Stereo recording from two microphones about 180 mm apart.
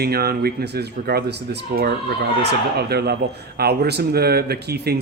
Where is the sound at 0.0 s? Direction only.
60° right (ahead or behind).